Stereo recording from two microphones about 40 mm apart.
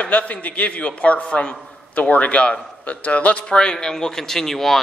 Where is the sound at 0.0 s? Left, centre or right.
Left.